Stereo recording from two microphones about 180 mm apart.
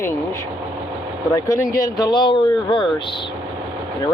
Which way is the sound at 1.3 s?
15° left (ahead or behind).